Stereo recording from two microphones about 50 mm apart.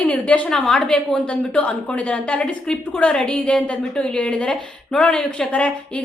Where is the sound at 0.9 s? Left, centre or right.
Centre.